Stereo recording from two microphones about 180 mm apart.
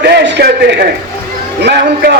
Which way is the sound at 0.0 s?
65° right (ahead or behind).